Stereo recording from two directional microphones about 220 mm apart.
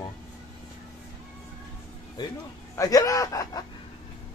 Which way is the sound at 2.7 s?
15° left (ahead or behind).